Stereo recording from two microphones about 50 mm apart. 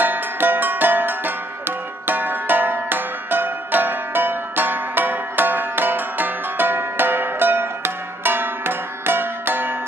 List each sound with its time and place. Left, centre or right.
0.0 s music: right